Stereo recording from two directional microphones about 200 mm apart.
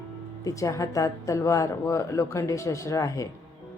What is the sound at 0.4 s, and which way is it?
Speech, 15° left (ahead or behind).